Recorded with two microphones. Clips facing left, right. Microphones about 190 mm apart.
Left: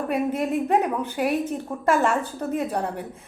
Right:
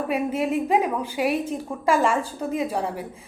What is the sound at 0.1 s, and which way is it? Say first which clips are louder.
A woman's voice: even; 5° right (ahead or behind).